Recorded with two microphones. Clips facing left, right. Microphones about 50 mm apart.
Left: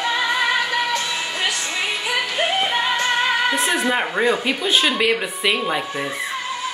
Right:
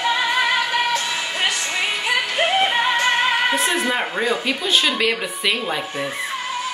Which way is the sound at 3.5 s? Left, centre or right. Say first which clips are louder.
Even; left.